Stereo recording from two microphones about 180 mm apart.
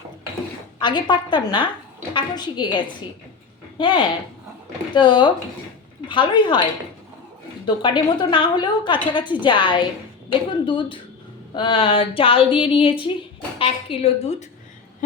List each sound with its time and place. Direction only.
0.8 s a woman's voice: 25° left (ahead or behind)
7.8 s a woman's voice: 25° left (ahead or behind)